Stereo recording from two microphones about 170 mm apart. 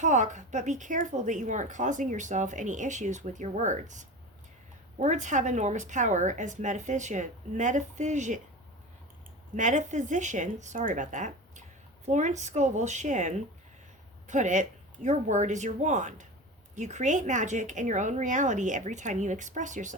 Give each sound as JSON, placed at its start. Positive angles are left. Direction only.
{"t": 0.0, "sound": "a woman's voice", "side_deg": -45}
{"t": 9.6, "sound": "a woman's voice", "side_deg": -45}